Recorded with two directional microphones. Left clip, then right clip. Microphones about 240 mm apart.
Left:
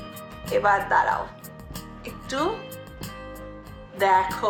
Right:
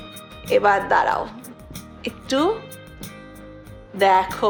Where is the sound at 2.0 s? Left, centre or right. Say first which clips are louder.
Right 6 dB; right.